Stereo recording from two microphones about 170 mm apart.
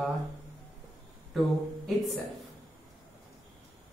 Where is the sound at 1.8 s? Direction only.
Centre (ahead or behind).